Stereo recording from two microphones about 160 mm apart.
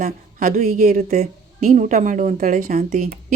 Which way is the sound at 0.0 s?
60° right (ahead or behind).